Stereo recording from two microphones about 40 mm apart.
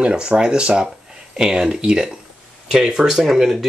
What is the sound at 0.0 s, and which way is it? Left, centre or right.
Speech, right.